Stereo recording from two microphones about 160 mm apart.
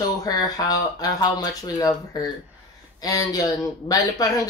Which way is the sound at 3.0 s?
25° left (ahead or behind).